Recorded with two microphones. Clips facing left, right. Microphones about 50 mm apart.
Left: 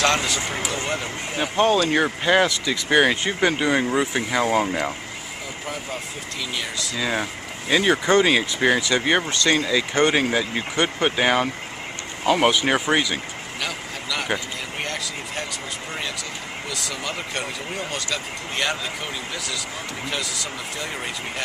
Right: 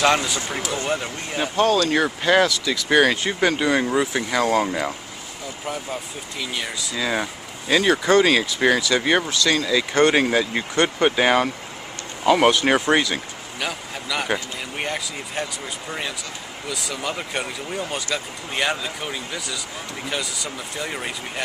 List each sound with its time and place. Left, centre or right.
0.0 s speech: centre
1.8 s speech: centre
2.9 s speech: centre
6.5 s speech: centre
9.3 s speech: left
9.7 s speech: centre
13.6 s vehicle: centre
16.6 s speech: centre